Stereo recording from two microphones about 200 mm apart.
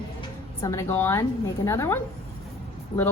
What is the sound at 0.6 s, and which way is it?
A woman's voice, 15° left (ahead or behind).